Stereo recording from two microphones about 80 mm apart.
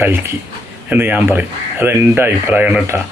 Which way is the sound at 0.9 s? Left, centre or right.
Right.